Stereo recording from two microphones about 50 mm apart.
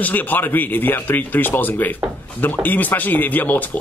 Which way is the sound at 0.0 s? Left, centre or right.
Left.